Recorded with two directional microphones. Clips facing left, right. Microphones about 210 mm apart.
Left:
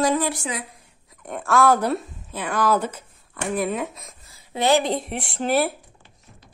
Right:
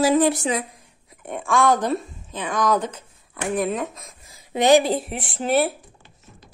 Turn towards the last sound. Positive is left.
turn(degrees=0)  # may be behind; listen again after turning